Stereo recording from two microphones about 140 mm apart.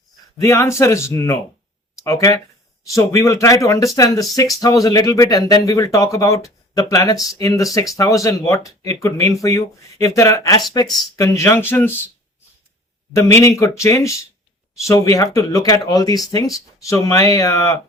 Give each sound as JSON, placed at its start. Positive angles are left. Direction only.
{"t": 0.3, "sound": "speech", "side_deg": 20}
{"t": 13.1, "sound": "speech", "side_deg": 20}